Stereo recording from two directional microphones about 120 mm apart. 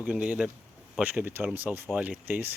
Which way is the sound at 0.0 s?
10° right (ahead or behind).